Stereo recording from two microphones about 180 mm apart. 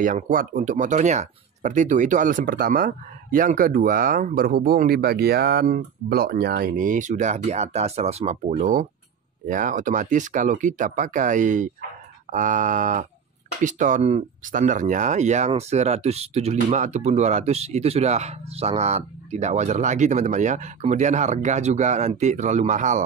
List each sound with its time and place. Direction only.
0.0 s speech: 50° right (ahead or behind)